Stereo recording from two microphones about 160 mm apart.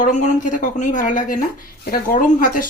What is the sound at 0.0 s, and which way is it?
A woman's voice, 50° left (ahead or behind).